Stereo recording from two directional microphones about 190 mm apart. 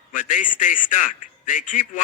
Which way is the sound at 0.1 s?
40° left (ahead or behind).